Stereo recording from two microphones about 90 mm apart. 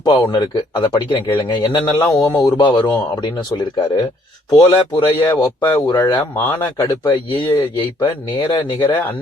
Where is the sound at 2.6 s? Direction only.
55° left (ahead or behind).